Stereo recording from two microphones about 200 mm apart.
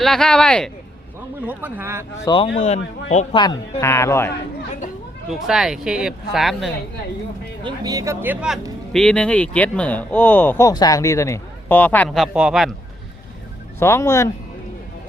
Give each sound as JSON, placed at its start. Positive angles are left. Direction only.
{"t": 0.0, "sound": "speech", "side_deg": 0}
{"t": 1.4, "sound": "speech", "side_deg": -10}
{"t": 2.2, "sound": "speech", "side_deg": 25}
{"t": 2.6, "sound": "speech", "side_deg": 35}
{"t": 3.3, "sound": "speech", "side_deg": 20}
{"t": 5.3, "sound": "speech", "side_deg": 0}
{"t": 7.6, "sound": "speech", "side_deg": -20}
{"t": 13.7, "sound": "speech", "side_deg": 15}